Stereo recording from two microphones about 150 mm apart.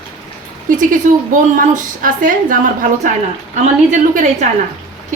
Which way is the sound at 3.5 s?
50° right (ahead or behind).